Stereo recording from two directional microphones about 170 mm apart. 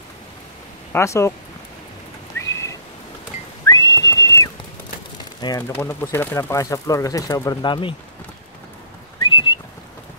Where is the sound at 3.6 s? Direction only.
20° left (ahead or behind).